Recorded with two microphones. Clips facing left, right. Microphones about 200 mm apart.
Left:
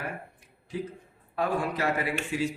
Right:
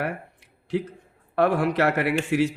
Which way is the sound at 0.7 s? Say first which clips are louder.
Right 7 dB; 70° right (ahead or behind).